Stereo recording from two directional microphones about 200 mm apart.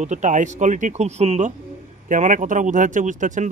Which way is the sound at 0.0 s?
35° right (ahead or behind).